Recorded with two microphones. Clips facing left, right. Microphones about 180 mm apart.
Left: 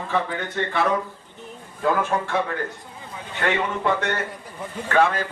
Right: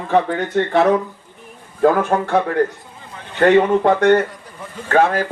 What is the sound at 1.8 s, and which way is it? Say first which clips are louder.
Speech: right 7 dB; 60° right (ahead or behind).